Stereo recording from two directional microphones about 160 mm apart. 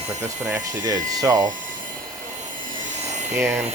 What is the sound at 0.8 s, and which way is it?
Speech, 20° right (ahead or behind).